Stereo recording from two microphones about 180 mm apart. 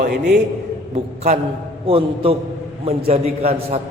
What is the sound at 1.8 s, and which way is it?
A man's voice, 30° right (ahead or behind).